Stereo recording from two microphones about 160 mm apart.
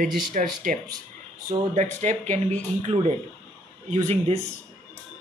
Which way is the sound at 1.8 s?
45° right (ahead or behind).